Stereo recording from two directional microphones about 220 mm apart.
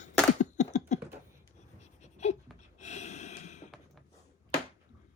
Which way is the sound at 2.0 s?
30° left (ahead or behind).